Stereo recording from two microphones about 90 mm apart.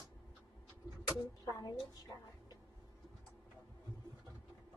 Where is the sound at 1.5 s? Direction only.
40° left (ahead or behind).